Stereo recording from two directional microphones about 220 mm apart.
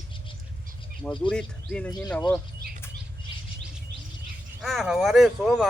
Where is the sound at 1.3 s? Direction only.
5° left (ahead or behind).